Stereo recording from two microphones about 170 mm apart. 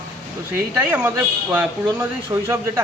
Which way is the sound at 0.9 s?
10° right (ahead or behind).